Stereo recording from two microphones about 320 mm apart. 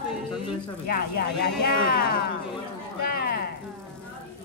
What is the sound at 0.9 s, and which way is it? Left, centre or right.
Speech, left.